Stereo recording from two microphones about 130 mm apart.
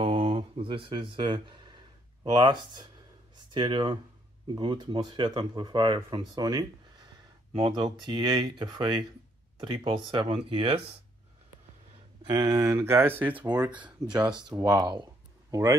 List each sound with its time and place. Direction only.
0.0 s a sound: 45° right (ahead or behind)
2.3 s speech: 35° right (ahead or behind)
12.2 s speech: 30° right (ahead or behind); by 13.5 s 15° right (ahead or behind)
13.7 s speech: 35° right (ahead or behind)